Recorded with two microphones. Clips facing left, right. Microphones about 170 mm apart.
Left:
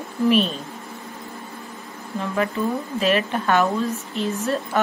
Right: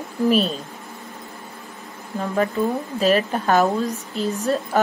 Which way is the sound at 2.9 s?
40° right (ahead or behind).